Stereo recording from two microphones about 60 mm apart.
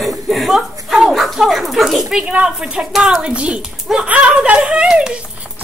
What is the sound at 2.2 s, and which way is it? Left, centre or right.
Speech, centre.